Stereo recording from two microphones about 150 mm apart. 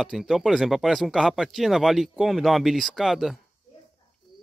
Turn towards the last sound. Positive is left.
turn(degrees=0)  # may be behind; listen again after turning